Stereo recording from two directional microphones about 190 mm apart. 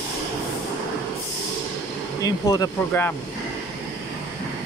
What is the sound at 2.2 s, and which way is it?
Speech, 20° left (ahead or behind).